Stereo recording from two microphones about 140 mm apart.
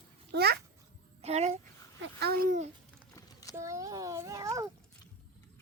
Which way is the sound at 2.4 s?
75° right (ahead or behind).